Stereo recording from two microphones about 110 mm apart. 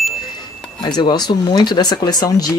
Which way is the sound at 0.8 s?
40° left (ahead or behind).